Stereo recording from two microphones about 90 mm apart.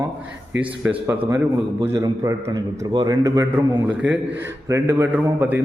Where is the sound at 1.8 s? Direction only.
35° right (ahead or behind).